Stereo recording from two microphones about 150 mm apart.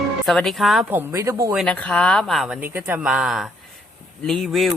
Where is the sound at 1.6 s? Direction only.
10° left (ahead or behind).